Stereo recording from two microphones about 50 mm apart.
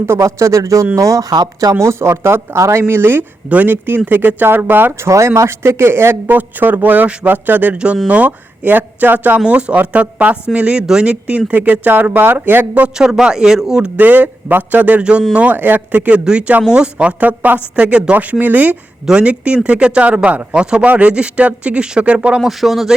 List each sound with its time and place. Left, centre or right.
0.0 s speech: right
1.8 s speech: right
2.8 s speech: right
5.0 s speech: right
6.2 s speech: right
9.5 s speech: right
13.0 s a man's voice: centre
13.8 s speech: right
15.5 s speech: right
22.4 s speech: centre